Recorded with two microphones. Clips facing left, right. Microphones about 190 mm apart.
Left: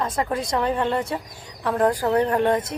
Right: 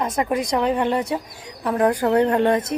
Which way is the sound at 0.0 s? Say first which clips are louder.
Right 3 dB; 15° right (ahead or behind).